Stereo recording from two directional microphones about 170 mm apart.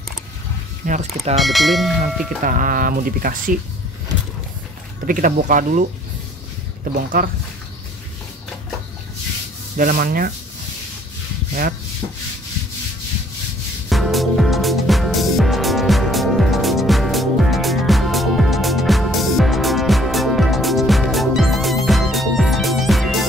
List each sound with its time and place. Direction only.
0.8 s speech: 50° right (ahead or behind)
1.3 s speech: centre (ahead or behind)
2.4 s speech: 55° right (ahead or behind)
5.0 s speech: 50° right (ahead or behind)
9.8 s speech: 55° right (ahead or behind)
13.8 s music: centre (ahead or behind)